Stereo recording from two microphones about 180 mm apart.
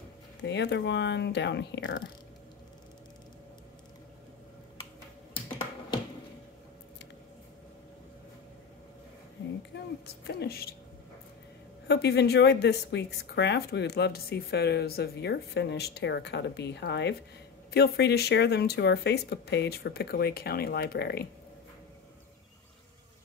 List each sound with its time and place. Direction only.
0.4 s speech: 75° left (ahead or behind)
9.7 s a sound: 85° left
10.0 s speech: 65° left (ahead or behind)
11.9 s speech: 70° left (ahead or behind)